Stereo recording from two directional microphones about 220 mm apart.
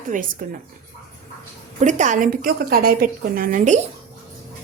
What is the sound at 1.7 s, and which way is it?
A woman's voice, 35° right (ahead or behind).